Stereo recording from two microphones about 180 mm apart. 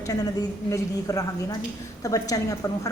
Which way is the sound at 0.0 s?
20° left (ahead or behind).